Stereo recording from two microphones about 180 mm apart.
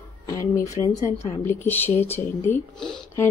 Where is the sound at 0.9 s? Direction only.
45° left (ahead or behind).